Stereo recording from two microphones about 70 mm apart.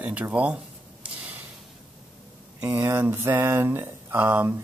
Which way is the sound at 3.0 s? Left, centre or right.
Right.